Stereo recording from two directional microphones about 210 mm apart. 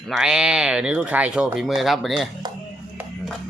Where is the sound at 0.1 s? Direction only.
5° right (ahead or behind).